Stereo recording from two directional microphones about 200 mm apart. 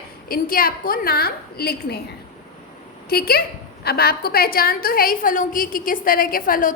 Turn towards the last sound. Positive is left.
turn(degrees=45)  # may be behind; listen again after turning